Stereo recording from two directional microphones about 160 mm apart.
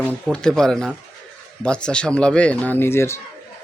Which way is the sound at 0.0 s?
5° left (ahead or behind).